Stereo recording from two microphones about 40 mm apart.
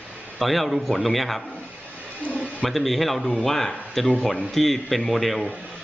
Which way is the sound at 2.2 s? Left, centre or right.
Right.